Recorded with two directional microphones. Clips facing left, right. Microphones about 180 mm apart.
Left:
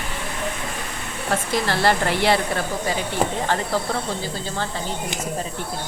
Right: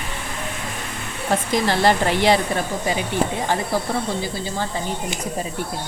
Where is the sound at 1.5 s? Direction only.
15° right (ahead or behind).